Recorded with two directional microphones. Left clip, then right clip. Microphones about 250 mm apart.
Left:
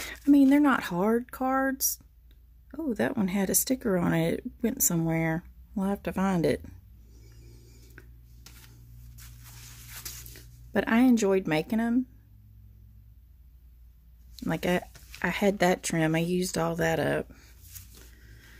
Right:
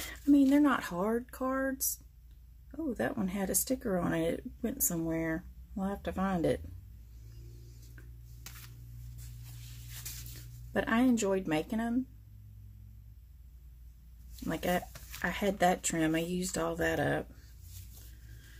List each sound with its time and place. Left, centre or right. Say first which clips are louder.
0.0 s speech: left 5 dB; left
8.0 s a sound: left 7 dB; left
10.7 s speech: left 5 dB; left
14.4 s speech: left 4 dB; left